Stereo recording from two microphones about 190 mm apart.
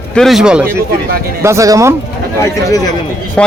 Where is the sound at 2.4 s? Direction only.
15° left (ahead or behind).